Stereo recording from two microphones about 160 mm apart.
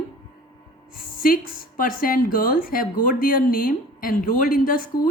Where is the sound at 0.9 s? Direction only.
65° left (ahead or behind).